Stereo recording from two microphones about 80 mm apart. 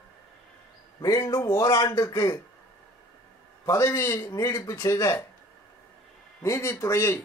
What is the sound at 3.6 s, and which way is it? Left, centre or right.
A man's voice, left.